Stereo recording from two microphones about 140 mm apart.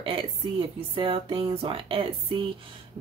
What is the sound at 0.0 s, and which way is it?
Speech, 40° right (ahead or behind).